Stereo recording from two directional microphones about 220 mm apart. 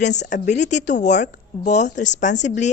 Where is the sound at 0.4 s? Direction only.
35° left (ahead or behind).